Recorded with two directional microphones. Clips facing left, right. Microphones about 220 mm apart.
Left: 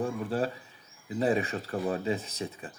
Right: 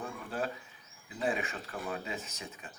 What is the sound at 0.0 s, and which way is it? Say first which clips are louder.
Speech: left 8 dB; 35° left (ahead or behind).